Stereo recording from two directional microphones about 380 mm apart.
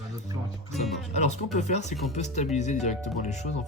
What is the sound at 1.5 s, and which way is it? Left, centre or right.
Speech, centre.